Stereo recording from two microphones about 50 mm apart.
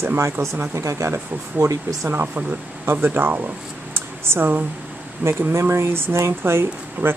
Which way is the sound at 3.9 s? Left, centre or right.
Right.